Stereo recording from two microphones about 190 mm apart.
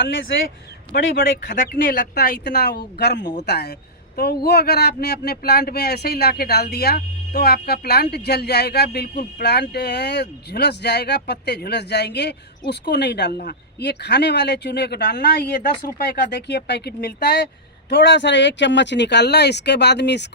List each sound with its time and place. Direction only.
0.9 s speech: 55° left (ahead or behind)
1.5 s speech: 45° left (ahead or behind); by 20.2 s 65° left (ahead or behind)